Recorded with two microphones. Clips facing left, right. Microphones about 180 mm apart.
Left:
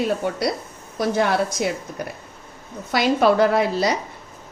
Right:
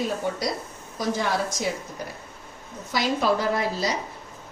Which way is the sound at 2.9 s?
65° left (ahead or behind).